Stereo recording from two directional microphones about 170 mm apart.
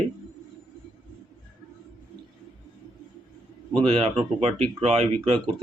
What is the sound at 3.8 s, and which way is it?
Speech, 35° right (ahead or behind).